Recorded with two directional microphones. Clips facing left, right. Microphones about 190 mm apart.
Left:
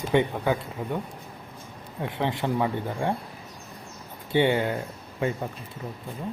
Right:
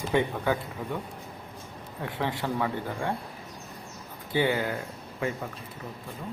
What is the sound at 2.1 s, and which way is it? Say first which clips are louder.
Speech: left 3 dB; 20° left (ahead or behind).